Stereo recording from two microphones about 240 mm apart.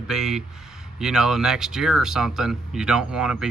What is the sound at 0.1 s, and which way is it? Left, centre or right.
Speech, centre.